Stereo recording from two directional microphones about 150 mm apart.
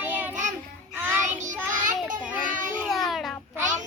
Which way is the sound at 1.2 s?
55° right (ahead or behind).